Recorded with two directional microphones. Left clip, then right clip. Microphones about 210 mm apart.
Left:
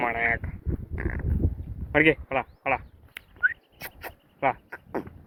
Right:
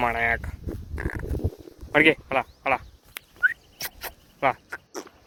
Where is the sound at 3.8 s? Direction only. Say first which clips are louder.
Right 4 dB; 10° right (ahead or behind).